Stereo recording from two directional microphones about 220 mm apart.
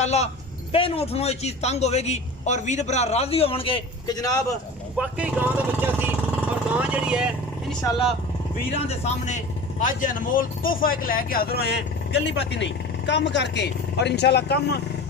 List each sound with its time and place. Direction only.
0.0 s a man's voice: 30° left (ahead or behind)
4.9 s speech: 5° right (ahead or behind)
8.7 s speech: 30° left (ahead or behind); by 14.8 s 50° left (ahead or behind)